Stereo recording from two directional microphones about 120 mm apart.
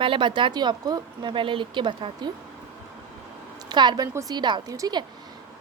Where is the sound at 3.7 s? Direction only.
35° right (ahead or behind).